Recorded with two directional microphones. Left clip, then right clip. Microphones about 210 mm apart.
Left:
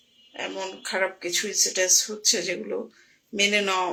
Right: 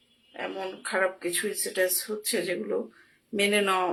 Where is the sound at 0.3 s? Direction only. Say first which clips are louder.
Left 2 dB; 5° left (ahead or behind).